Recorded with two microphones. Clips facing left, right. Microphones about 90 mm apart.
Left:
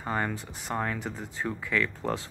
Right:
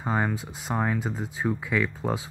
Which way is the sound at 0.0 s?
10° right (ahead or behind).